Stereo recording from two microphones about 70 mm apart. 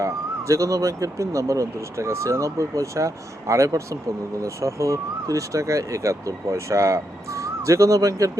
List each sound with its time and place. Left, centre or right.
0.0 s speech: right